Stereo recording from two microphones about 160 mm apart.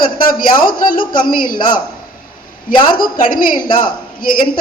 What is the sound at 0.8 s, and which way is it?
Speech, 60° left (ahead or behind).